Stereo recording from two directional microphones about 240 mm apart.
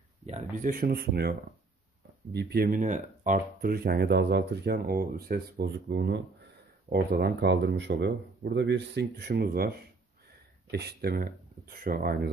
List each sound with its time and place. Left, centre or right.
0.2 s speech: right
2.3 s speech: right